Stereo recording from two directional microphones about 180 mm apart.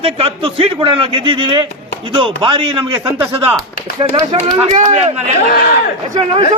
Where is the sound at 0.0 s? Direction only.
30° right (ahead or behind).